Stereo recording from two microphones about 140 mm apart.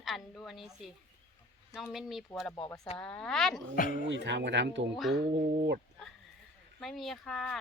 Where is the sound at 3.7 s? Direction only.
85° left.